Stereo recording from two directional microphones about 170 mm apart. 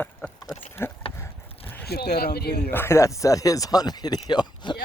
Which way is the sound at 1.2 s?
10° left (ahead or behind).